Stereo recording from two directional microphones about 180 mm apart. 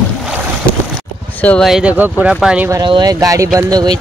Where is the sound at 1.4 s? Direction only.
5° left (ahead or behind).